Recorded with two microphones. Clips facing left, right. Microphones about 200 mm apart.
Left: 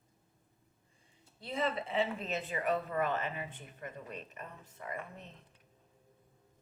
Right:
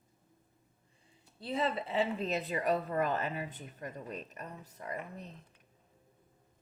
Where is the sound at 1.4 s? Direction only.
35° right (ahead or behind).